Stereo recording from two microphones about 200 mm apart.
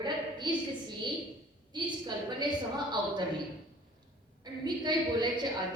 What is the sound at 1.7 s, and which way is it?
Speech, 20° right (ahead or behind).